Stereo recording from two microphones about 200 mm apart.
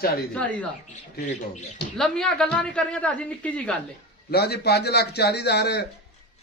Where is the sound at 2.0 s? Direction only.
5° left (ahead or behind).